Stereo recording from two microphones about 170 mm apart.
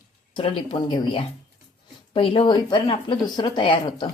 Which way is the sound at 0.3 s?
30° left (ahead or behind).